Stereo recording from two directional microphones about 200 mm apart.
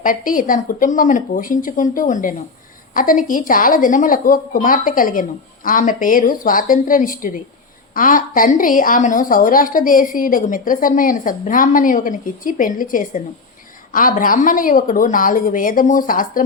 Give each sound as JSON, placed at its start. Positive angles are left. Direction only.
{"t": 0.0, "sound": "a woman's voice", "side_deg": 45}